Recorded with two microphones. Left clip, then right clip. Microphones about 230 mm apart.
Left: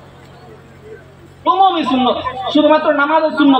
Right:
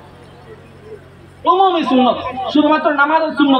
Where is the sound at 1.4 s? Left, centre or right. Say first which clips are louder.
Left 1 dB; right.